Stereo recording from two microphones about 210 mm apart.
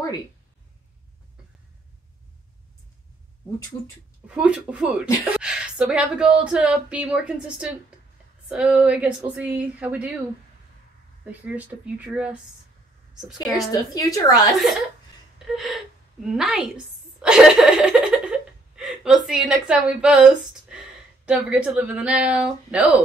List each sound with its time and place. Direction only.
4.3 s speech: 5° right (ahead or behind)
11.2 s speech: 5° right (ahead or behind)
13.5 s a woman's voice: 15° left (ahead or behind)
15.3 s a sound: centre (ahead or behind)
20.7 s speech: 5° right (ahead or behind)